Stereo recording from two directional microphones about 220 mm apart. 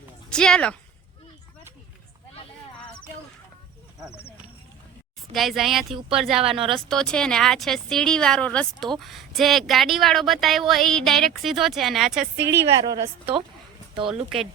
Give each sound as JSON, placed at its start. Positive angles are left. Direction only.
{"t": 0.3, "sound": "speech", "side_deg": 5}
{"t": 5.3, "sound": "speech", "side_deg": 0}
{"t": 12.5, "sound": "a woman's voice", "side_deg": -15}